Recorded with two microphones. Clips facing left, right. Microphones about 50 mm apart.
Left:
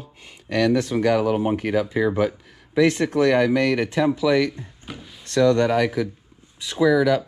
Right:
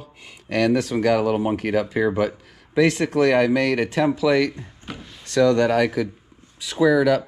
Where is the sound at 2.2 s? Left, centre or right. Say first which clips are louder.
Even; right.